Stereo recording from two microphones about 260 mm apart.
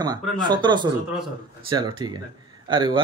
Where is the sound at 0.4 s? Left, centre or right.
Centre.